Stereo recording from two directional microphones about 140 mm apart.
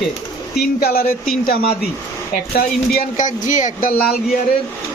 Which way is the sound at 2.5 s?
75° left (ahead or behind).